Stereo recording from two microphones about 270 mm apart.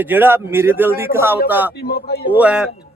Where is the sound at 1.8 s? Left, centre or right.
Left.